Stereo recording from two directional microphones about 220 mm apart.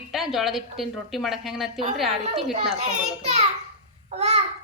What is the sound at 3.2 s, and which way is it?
Speech, 30° right (ahead or behind).